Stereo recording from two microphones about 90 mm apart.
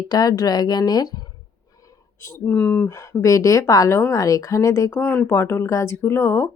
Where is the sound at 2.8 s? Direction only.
35° left (ahead or behind).